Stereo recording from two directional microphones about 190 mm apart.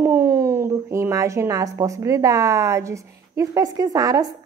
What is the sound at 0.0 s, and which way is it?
A woman's voice, 10° right (ahead or behind).